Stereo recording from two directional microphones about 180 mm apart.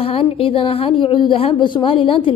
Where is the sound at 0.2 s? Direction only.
30° left (ahead or behind).